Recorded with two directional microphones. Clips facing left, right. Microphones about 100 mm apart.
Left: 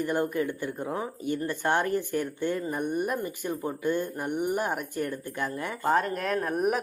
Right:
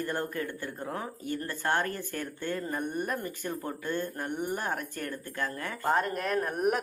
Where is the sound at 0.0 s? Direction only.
15° left (ahead or behind).